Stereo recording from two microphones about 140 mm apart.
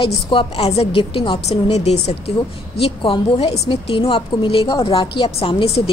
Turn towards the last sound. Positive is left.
turn(degrees=40)  # may be behind; listen again after turning